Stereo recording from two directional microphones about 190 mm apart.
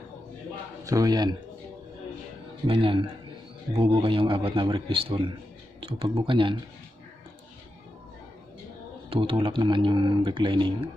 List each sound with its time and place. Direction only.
0.8 s speech: 20° right (ahead or behind)
2.6 s speech: 30° right (ahead or behind)
9.1 s speech: 30° right (ahead or behind)